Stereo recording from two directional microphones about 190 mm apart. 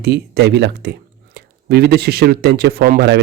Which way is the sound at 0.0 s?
60° right (ahead or behind).